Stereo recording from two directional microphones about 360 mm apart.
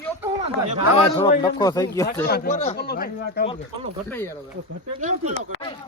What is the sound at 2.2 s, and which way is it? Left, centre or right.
Speech, left.